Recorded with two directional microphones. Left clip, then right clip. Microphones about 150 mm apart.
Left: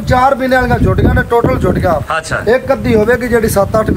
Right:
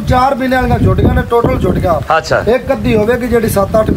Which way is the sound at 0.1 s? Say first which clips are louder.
Left 1 dB; 25° left (ahead or behind).